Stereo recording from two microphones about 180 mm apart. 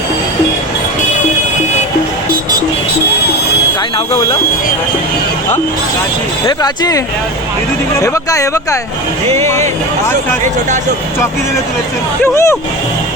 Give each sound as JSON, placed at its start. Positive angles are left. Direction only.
{"t": 6.4, "sound": "speech", "side_deg": 20}
{"t": 12.2, "sound": "speech", "side_deg": 15}